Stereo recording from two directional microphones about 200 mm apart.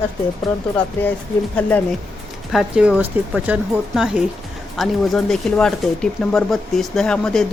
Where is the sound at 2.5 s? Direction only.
5° right (ahead or behind).